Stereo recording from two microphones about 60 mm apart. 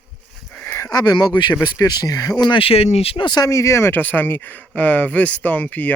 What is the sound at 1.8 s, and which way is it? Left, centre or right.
Speech, left.